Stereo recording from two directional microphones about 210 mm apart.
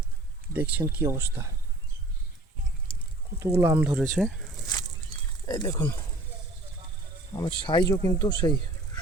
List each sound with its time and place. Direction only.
0.5 s speech: 10° right (ahead or behind)
2.9 s a sound: 25° left (ahead or behind)
3.6 s speech: 10° right (ahead or behind)
4.6 s a sound: 20° left (ahead or behind)
5.5 s speech: 15° left (ahead or behind)
7.3 s speech: 20° left (ahead or behind)